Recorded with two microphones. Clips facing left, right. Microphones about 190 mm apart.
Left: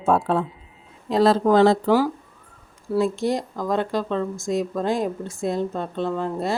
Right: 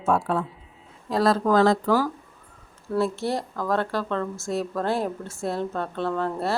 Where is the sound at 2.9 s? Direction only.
15° left (ahead or behind).